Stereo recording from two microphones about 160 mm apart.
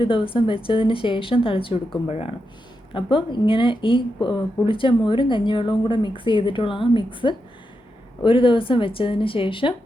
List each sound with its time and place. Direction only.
0.0 s speech: 30° left (ahead or behind)